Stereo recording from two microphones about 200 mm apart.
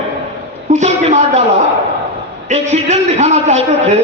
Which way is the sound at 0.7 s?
35° right (ahead or behind).